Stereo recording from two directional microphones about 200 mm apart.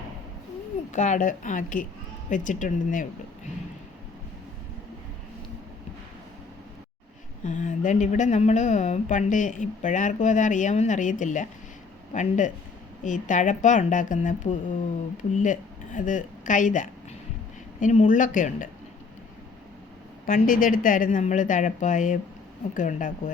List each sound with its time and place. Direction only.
0.9 s a woman's voice: 40° left (ahead or behind)
7.4 s a woman's voice: 40° left (ahead or behind)
20.2 s a woman's voice: 45° left (ahead or behind)